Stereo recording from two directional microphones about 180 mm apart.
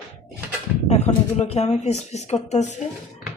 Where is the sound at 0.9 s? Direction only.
35° left (ahead or behind).